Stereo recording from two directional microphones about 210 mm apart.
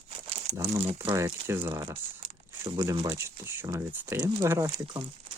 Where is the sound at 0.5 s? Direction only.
15° right (ahead or behind).